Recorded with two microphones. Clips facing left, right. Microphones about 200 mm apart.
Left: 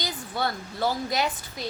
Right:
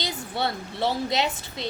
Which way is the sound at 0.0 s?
25° right (ahead or behind).